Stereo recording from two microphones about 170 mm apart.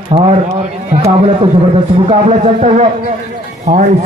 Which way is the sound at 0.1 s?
35° right (ahead or behind).